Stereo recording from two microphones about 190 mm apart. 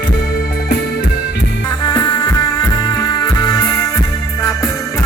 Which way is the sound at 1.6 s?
20° left (ahead or behind).